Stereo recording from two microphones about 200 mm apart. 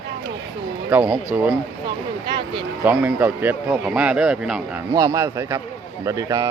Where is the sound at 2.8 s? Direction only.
10° right (ahead or behind).